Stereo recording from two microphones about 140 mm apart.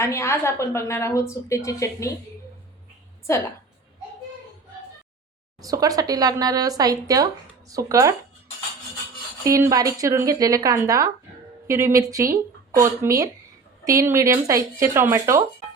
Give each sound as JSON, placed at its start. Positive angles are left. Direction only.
{"t": 0.0, "sound": "a woman's voice", "side_deg": 20}
{"t": 3.3, "sound": "a woman's voice", "side_deg": 20}
{"t": 5.6, "sound": "speech", "side_deg": -25}
{"t": 9.4, "sound": "speech", "side_deg": -20}